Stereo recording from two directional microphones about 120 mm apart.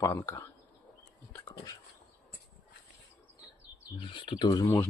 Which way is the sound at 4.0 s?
40° left (ahead or behind).